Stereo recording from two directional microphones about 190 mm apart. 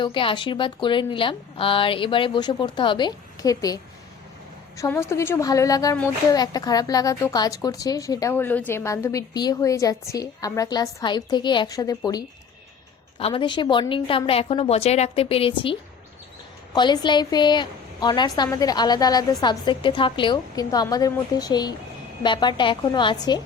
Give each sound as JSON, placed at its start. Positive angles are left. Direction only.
{"t": 0.0, "sound": "speech", "side_deg": 25}
{"t": 4.8, "sound": "a woman's voice", "side_deg": 15}